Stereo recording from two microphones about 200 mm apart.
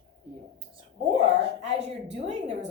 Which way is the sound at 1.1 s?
30° right (ahead or behind).